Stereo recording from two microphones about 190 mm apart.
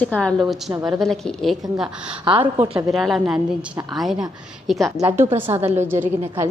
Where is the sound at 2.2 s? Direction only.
25° right (ahead or behind).